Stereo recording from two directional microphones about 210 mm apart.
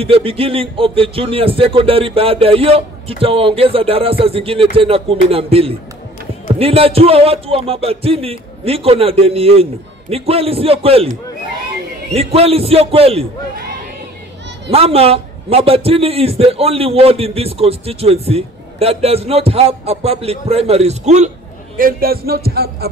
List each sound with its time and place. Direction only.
0.0 s a man's voice: 25° right (ahead or behind)
14.7 s a man's voice: 30° right (ahead or behind)
21.7 s speech: 45° right (ahead or behind)